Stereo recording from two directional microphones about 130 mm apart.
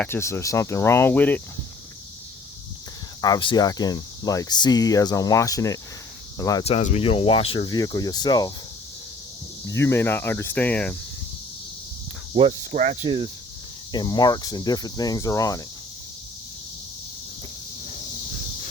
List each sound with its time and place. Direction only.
0.0 s speech: 20° left (ahead or behind)
3.2 s speech: 30° left (ahead or behind)
6.7 s speech: 55° left (ahead or behind)
7.7 s speech: 30° left (ahead or behind)
9.6 s cricket: 20° left (ahead or behind)
12.3 s speech: 45° right (ahead or behind)
12.7 s cricket: 70° right (ahead or behind)
13.1 s speech: 45° right (ahead or behind)
13.9 s speech: 35° left (ahead or behind)